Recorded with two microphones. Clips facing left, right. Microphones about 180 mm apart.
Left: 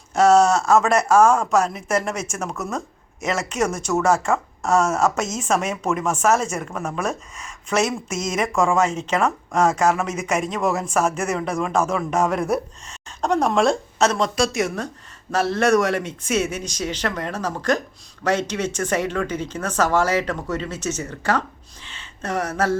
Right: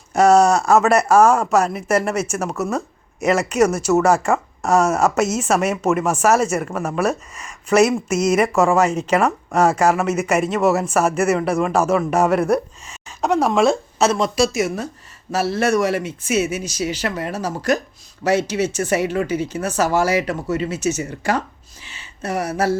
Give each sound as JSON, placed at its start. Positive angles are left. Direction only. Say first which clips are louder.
{"t": 0.1, "sound": "speech", "louder": "right 2 dB", "side_deg": -10}